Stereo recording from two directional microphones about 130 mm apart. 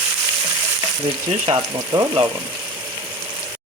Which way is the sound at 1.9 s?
35° right (ahead or behind).